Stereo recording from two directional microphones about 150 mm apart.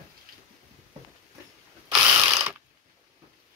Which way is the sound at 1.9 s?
20° right (ahead or behind).